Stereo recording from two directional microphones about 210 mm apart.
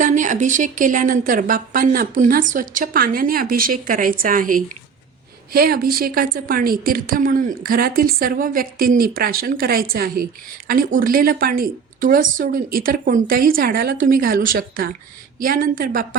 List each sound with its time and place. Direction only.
0.0 s a woman's voice: 35° right (ahead or behind)